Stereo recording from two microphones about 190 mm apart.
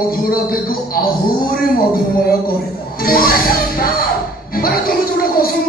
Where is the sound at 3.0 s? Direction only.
50° left (ahead or behind).